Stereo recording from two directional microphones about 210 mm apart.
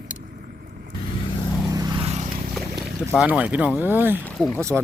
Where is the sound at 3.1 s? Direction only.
5° right (ahead or behind).